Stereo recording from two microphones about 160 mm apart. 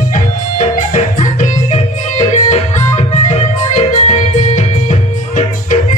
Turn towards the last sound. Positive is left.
turn(degrees=45)  # may be behind; listen again after turning